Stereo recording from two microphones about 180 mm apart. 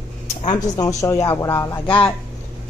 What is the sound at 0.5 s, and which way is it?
Speech, 20° left (ahead or behind).